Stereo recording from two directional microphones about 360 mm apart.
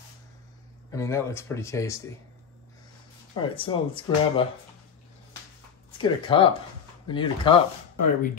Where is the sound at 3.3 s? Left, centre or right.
Centre.